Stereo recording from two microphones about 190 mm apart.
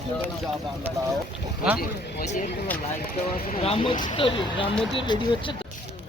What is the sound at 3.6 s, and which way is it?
Speech, 30° left (ahead or behind).